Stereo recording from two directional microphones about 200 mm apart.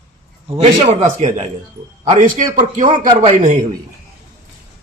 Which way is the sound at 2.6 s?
40° right (ahead or behind).